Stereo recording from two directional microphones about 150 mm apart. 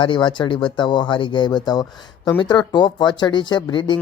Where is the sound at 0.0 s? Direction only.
35° left (ahead or behind).